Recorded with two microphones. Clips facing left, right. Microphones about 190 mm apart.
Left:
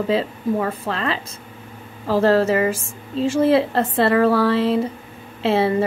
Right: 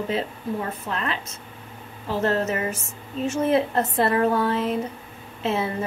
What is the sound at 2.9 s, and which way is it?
Speech, 30° left (ahead or behind).